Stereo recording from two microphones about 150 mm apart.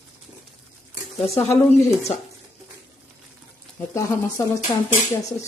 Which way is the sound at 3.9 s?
20° left (ahead or behind).